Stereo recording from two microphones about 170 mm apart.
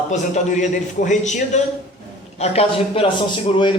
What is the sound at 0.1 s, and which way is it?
A man's voice, 45° left (ahead or behind).